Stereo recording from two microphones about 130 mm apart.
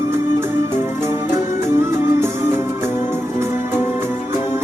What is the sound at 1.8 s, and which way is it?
Music, 20° right (ahead or behind).